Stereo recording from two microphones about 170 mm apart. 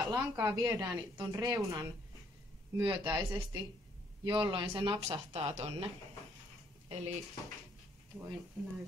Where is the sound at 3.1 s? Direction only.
25° right (ahead or behind).